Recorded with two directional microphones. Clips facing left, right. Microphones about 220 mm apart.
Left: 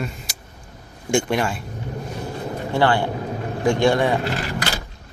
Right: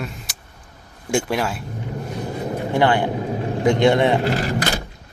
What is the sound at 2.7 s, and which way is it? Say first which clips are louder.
A man's voice: right 1 dB; 15° right (ahead or behind).